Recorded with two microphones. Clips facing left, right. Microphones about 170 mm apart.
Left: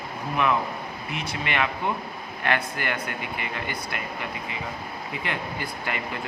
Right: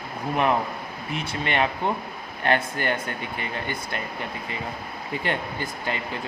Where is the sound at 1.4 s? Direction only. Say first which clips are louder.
Right 3 dB; 35° right (ahead or behind).